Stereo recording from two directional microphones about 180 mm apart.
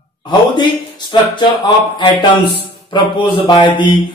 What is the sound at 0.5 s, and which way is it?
Speech, 25° left (ahead or behind).